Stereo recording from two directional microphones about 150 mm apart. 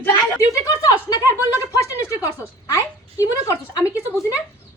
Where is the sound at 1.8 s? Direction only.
20° left (ahead or behind).